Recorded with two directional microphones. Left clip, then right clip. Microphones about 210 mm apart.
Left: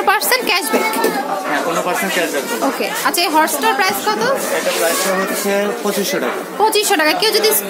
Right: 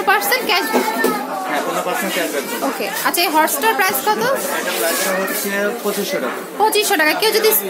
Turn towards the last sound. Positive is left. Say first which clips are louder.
# left 1 dB
turn(degrees=5)  # may be behind; listen again after turning